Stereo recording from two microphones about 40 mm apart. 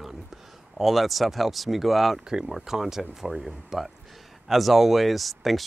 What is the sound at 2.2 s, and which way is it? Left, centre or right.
Speech, centre.